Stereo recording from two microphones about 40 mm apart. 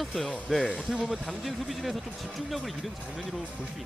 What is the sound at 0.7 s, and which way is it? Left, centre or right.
Speech, right.